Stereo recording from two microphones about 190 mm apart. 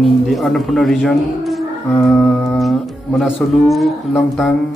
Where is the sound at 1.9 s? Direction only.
10° left (ahead or behind).